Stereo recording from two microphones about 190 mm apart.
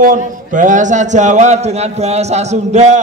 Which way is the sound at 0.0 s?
45° right (ahead or behind).